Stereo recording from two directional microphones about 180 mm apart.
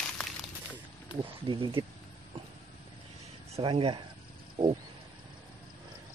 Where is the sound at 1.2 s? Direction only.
30° right (ahead or behind).